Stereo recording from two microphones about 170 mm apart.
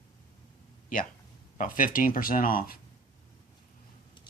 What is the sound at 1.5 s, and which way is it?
Speech, 55° left (ahead or behind).